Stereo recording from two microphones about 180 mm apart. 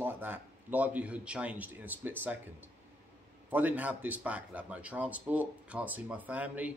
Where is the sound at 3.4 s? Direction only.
10° right (ahead or behind).